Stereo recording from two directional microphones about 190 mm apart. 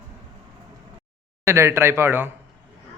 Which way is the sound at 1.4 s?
15° right (ahead or behind).